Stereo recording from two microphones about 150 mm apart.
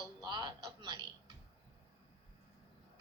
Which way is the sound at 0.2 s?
30° right (ahead or behind).